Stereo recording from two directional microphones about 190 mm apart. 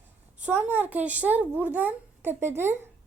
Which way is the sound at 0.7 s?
10° right (ahead or behind).